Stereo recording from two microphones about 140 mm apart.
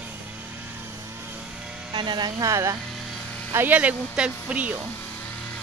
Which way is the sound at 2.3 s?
20° right (ahead or behind).